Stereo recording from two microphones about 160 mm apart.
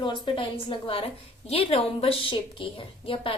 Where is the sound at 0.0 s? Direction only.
30° left (ahead or behind).